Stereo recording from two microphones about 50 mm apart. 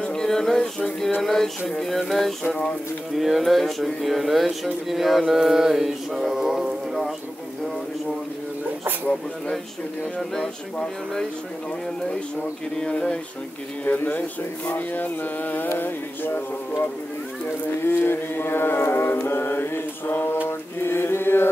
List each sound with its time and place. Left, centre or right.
0.0 s a sound: centre
1.2 s speech: centre
4.8 s mantra: centre
10.1 s speech: centre
12.7 s speech: centre
13.8 s music: left
17.8 s mantra: left